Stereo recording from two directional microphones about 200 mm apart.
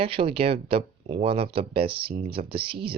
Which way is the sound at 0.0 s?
25° right (ahead or behind).